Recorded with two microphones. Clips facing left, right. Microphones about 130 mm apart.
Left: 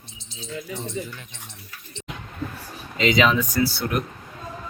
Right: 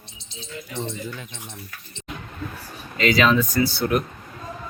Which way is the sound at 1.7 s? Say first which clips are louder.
Right 1 dB; 55° right (ahead or behind).